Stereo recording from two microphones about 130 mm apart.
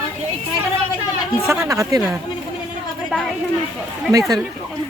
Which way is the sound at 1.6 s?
25° right (ahead or behind).